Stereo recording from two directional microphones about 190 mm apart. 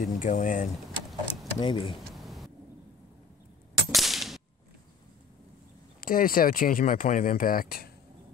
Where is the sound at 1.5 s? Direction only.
25° left (ahead or behind).